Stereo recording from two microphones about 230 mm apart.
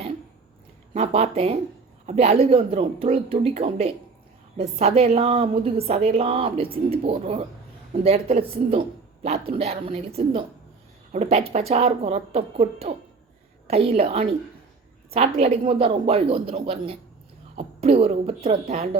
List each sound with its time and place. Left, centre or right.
0.9 s a woman's voice: right